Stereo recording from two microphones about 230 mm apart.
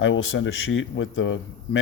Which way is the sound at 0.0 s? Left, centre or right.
Left.